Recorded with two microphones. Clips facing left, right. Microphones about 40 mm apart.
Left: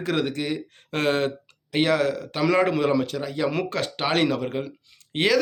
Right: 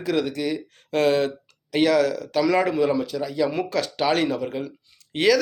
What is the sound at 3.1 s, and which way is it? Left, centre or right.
Speech, left.